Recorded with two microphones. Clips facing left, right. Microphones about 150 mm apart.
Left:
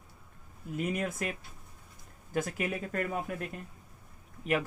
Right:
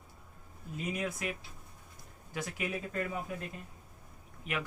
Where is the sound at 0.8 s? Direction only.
50° left (ahead or behind).